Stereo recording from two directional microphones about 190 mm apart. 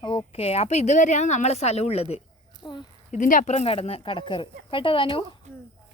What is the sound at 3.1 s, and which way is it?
Speech, 40° left (ahead or behind).